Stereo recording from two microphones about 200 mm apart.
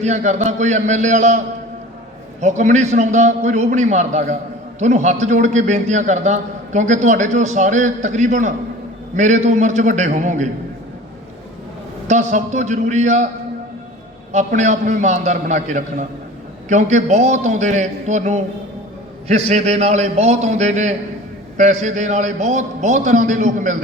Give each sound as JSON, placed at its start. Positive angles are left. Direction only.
{"t": 0.0, "sound": "a man's voice", "side_deg": -35}
{"t": 12.0, "sound": "a man's voice", "side_deg": -35}
{"t": 14.3, "sound": "a man's voice", "side_deg": -35}